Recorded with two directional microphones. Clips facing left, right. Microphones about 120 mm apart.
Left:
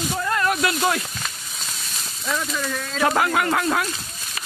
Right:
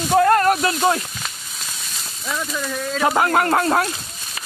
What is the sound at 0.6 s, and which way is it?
Speech, 30° right (ahead or behind).